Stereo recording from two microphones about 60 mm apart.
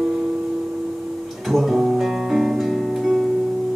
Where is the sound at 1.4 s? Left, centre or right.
Centre.